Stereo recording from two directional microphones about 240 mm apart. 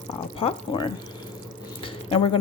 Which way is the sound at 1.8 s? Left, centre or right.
Left.